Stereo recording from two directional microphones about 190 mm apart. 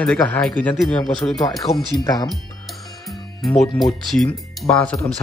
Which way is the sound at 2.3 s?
Centre (ahead or behind).